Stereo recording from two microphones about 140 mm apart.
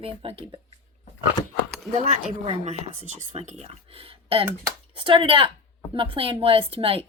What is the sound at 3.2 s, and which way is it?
Speech, 55° right (ahead or behind).